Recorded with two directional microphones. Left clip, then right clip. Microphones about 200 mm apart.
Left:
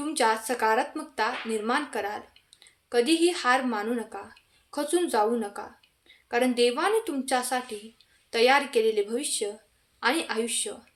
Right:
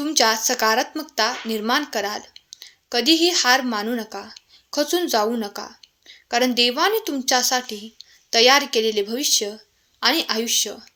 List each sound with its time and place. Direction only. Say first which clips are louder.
0.0 s speech: right 6 dB; 40° right (ahead or behind)